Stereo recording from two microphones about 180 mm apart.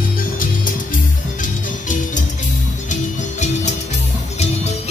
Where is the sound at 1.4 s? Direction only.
45° left (ahead or behind).